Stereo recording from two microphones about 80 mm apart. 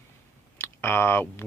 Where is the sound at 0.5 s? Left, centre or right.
Left.